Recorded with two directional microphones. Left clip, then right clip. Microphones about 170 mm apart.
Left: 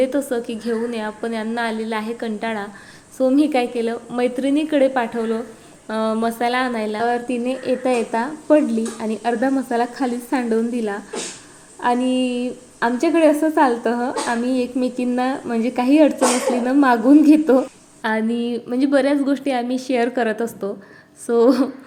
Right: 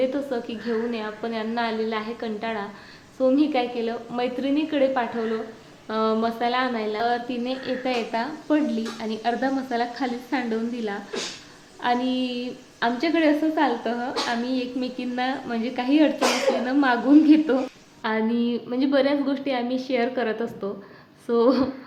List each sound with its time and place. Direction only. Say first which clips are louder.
0.0 s a woman's voice: left 5 dB; 35° left (ahead or behind)
7.9 s a woman's voice: left 5 dB; 25° left (ahead or behind)